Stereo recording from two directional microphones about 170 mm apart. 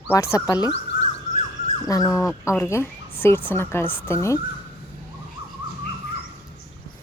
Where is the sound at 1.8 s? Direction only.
20° left (ahead or behind).